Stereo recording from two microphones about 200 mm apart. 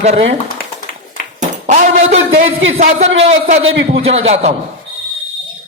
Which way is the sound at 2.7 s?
30° right (ahead or behind).